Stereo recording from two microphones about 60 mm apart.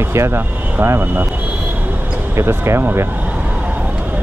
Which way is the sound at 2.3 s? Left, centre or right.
Right.